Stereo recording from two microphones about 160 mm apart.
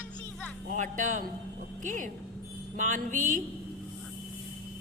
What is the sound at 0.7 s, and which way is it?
Speech, 55° right (ahead or behind).